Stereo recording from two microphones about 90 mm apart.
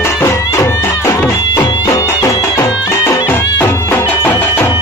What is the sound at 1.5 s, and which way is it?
Music, 55° left (ahead or behind).